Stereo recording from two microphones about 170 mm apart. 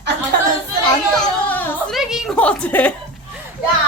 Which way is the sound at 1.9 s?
Centre (ahead or behind).